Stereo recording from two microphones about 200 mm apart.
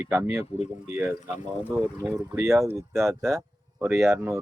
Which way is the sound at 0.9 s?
10° right (ahead or behind).